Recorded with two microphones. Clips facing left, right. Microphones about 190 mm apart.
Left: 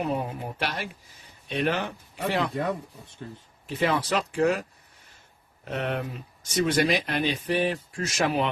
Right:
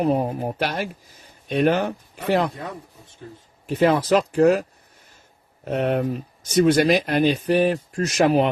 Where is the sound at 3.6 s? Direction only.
45° right (ahead or behind).